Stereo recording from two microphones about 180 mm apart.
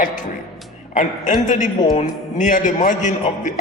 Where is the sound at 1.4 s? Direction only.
45° left (ahead or behind).